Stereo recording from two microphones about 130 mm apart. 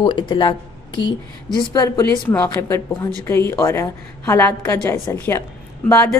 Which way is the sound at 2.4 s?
20° left (ahead or behind).